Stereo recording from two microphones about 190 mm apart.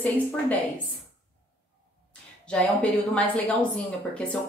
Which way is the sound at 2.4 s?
5° left (ahead or behind).